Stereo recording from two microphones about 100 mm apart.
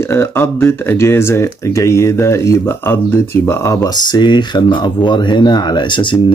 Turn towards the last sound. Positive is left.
turn(degrees=45)  # may be behind; listen again after turning